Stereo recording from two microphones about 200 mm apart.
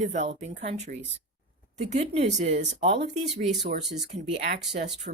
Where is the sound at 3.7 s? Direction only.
55° right (ahead or behind).